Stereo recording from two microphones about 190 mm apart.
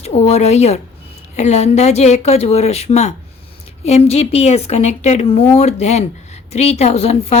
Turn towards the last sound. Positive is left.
turn(degrees=35)  # may be behind; listen again after turning